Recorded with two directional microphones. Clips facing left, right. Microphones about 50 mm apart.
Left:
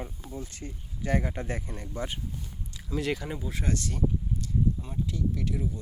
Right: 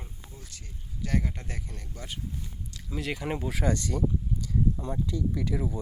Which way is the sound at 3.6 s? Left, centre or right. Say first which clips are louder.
Right 3 dB; right.